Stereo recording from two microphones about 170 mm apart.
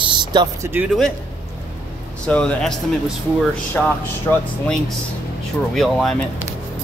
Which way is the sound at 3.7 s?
5° left (ahead or behind).